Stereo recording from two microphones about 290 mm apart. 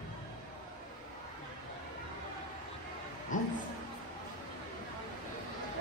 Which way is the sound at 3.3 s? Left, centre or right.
Left.